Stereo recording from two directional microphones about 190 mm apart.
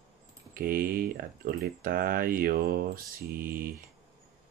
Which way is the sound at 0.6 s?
50° right (ahead or behind).